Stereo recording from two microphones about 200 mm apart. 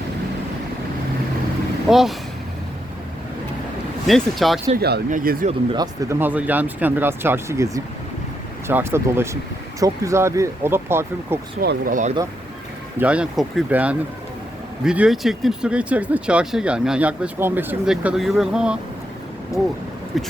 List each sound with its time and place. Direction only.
1.9 s speech: centre (ahead or behind)
4.0 s speech: centre (ahead or behind)
4.8 s speech: 55° right (ahead or behind)
5.7 s speech: 20° right (ahead or behind)
11.6 s speech: 50° right (ahead or behind)
13.0 s speech: 5° right (ahead or behind)
19.5 s speech: 15° left (ahead or behind)
20.1 s speech: centre (ahead or behind)